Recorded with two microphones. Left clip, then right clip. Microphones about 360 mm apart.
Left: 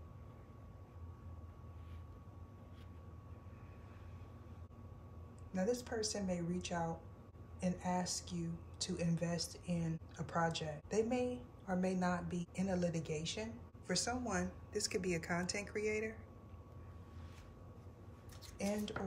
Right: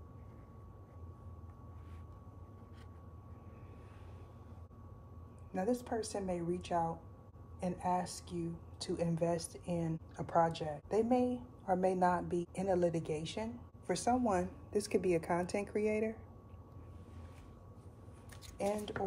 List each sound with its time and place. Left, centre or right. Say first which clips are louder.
5.5 s a woman's voice: right 2 dB; centre